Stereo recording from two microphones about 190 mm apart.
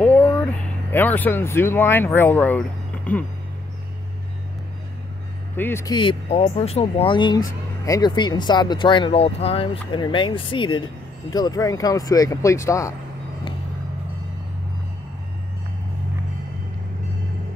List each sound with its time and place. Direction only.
0.0 s speech: 10° left (ahead or behind)
5.6 s speech: 15° left (ahead or behind)
5.9 s speech: 30° left (ahead or behind)